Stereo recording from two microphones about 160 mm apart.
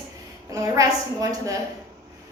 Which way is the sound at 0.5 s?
20° right (ahead or behind).